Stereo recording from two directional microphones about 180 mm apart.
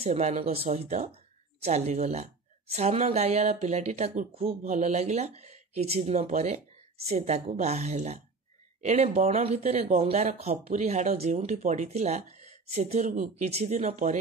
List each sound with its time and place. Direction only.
0.0 s speech: 40° right (ahead or behind)